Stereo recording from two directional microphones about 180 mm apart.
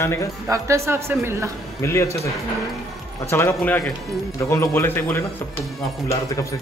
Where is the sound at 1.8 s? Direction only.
15° left (ahead or behind).